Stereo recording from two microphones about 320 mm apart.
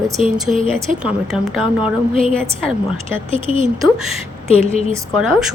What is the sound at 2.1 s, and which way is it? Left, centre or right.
A woman's voice, centre.